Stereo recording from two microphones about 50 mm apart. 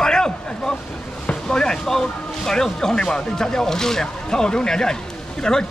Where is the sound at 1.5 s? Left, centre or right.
Centre.